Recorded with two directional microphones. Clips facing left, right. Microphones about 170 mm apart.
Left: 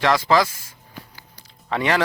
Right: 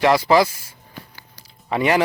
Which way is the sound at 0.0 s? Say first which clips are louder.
Right 3 dB; 15° right (ahead or behind).